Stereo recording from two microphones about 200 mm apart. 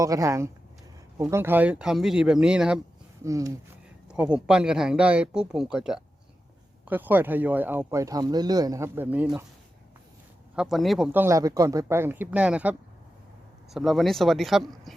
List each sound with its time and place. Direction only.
0.0 s speech: 15° right (ahead or behind)
3.2 s speech: 15° right (ahead or behind)
4.1 s speech: 5° right (ahead or behind)
10.5 s speech: 5° right (ahead or behind)
13.7 s speech: centre (ahead or behind)